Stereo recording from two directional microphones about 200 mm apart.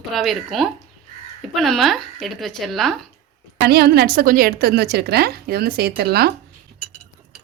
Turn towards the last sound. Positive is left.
turn(degrees=-50)  # may be behind; listen again after turning